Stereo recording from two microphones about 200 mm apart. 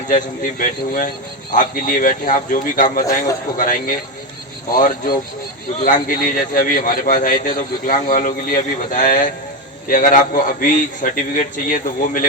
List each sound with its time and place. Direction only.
0.6 s a man's voice: 45° left (ahead or behind)